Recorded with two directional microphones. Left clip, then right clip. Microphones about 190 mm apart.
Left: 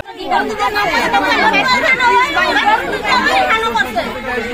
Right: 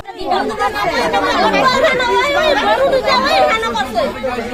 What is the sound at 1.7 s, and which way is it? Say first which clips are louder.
Speech: left 1 dB; 45° right (ahead or behind).